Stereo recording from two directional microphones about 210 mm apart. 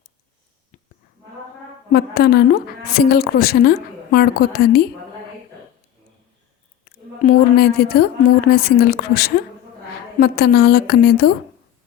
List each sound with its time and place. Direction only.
1.9 s a woman's voice: 45° left (ahead or behind)
7.2 s a woman's voice: 45° left (ahead or behind)